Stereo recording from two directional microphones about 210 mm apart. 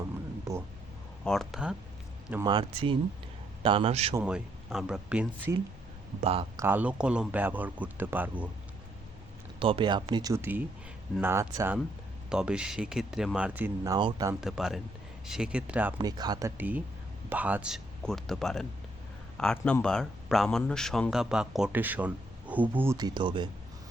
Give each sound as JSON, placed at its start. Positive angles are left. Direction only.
{"t": 1.2, "sound": "speech", "side_deg": 0}
{"t": 2.3, "sound": "speech", "side_deg": -20}
{"t": 4.1, "sound": "speech", "side_deg": -5}
{"t": 6.1, "sound": "speech", "side_deg": -25}
{"t": 6.6, "sound": "speech", "side_deg": -10}
{"t": 9.6, "sound": "speech", "side_deg": -25}
{"t": 14.4, "sound": "speech", "side_deg": 0}
{"t": 16.0, "sound": "speech", "side_deg": -20}